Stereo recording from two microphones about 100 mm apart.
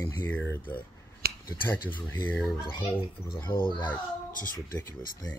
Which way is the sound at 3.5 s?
55° left (ahead or behind).